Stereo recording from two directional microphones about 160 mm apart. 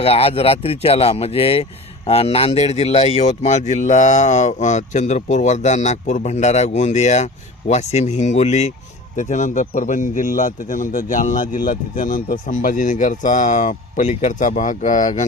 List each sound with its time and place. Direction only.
0.0 s a man's voice: 35° left (ahead or behind)